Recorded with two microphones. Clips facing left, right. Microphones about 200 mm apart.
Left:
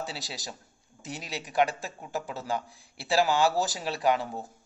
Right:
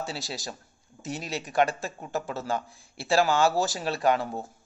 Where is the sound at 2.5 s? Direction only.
50° right (ahead or behind).